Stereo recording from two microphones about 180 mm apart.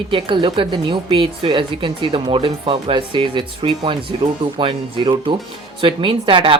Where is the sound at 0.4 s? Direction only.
25° right (ahead or behind).